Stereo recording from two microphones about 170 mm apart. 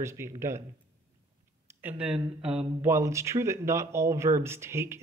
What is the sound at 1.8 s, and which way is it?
Speech, 5° right (ahead or behind).